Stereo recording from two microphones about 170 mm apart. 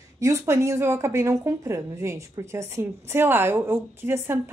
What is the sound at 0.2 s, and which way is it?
Speech, 15° right (ahead or behind).